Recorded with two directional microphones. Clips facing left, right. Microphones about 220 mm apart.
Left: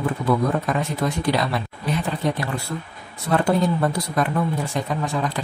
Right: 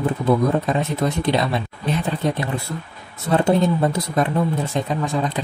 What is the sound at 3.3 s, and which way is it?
Speech, 25° right (ahead or behind).